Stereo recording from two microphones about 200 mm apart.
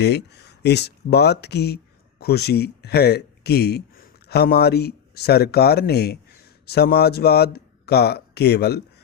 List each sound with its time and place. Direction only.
0.0 s speech: 55° left (ahead or behind)